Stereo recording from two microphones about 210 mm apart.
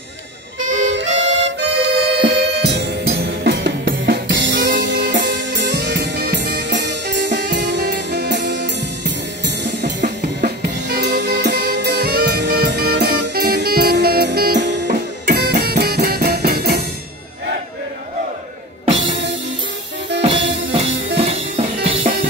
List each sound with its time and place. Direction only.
1.1 s music: 60° right (ahead or behind)
9.6 s drum kit: 55° right (ahead or behind)
15.2 s music: 50° right (ahead or behind)
18.9 s music: 25° right (ahead or behind)
20.2 s music: 25° right (ahead or behind)